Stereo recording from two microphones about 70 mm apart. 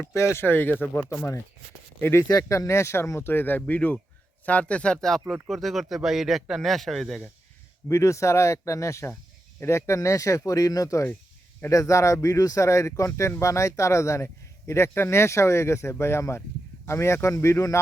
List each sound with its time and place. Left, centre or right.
0.1 s speech: left
2.2 s a man's voice: left; by 7.2 s centre
7.9 s speech: left